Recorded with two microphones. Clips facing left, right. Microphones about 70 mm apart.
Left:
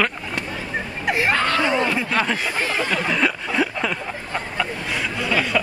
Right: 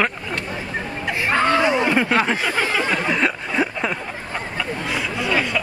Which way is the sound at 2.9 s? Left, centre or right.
Centre.